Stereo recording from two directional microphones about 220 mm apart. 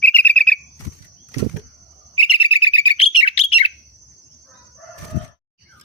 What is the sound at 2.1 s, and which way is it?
Bird, 25° left (ahead or behind).